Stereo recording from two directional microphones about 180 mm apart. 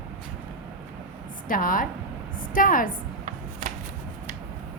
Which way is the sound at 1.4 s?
50° left (ahead or behind).